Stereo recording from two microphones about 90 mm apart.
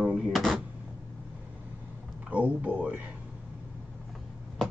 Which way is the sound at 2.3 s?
15° right (ahead or behind).